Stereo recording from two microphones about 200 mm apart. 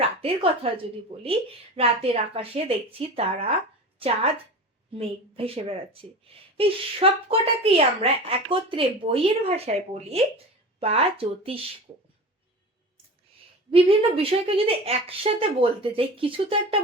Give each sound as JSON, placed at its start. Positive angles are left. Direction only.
{"t": 0.2, "sound": "a woman's voice", "side_deg": -30}
{"t": 13.7, "sound": "a woman's voice", "side_deg": -30}